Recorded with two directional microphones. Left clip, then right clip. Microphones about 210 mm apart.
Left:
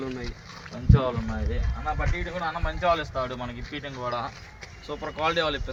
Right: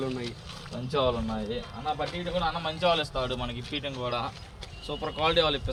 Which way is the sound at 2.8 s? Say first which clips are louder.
Left 1 dB; 30° right (ahead or behind).